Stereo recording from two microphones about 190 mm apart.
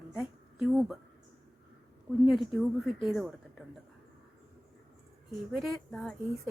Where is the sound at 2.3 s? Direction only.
Centre (ahead or behind).